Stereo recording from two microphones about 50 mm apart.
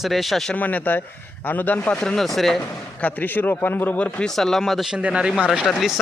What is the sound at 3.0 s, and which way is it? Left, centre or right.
A man's voice, left.